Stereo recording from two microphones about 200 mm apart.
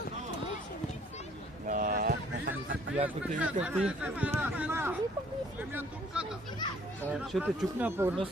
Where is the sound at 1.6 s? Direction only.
40° right (ahead or behind).